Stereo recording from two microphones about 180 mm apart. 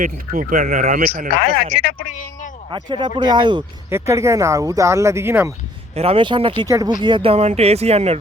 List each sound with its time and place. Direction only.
0.0 s speech: 50° right (ahead or behind)
1.7 s speech: 55° left (ahead or behind)
2.7 s speech: 25° right (ahead or behind)
3.8 s speech: 15° right (ahead or behind)
6.0 s speech: 30° right (ahead or behind)